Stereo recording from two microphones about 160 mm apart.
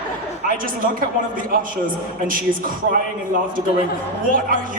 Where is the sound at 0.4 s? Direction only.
60° right (ahead or behind).